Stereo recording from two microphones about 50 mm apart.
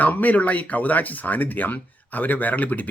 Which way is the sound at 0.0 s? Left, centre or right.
Left.